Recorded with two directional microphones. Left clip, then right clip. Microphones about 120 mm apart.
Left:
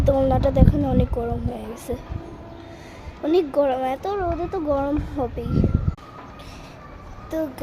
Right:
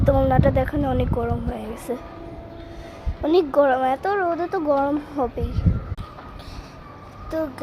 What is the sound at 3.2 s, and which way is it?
Speech, 5° right (ahead or behind).